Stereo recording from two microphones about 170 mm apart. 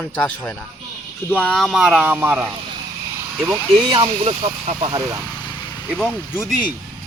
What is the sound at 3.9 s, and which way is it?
Speech, 30° right (ahead or behind).